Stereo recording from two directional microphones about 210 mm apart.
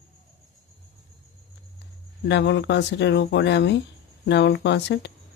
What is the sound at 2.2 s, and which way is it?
Speech, 55° left (ahead or behind).